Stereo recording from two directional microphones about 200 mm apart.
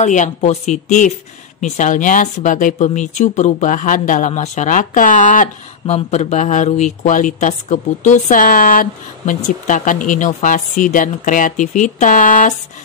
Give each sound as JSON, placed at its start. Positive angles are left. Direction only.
{"t": 0.0, "sound": "speech", "side_deg": 35}